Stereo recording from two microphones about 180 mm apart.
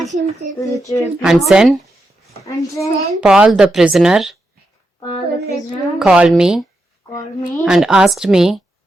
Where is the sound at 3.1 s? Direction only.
5° right (ahead or behind).